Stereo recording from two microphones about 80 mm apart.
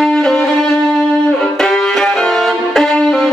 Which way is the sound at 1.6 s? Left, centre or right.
Centre.